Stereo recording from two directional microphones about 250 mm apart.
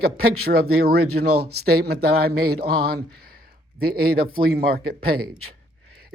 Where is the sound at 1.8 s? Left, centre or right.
Right.